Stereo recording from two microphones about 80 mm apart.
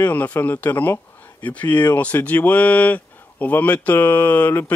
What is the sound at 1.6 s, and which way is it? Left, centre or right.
Speech, left.